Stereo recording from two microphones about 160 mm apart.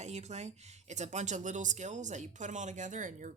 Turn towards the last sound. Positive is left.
turn(degrees=-55)  # may be behind; listen again after turning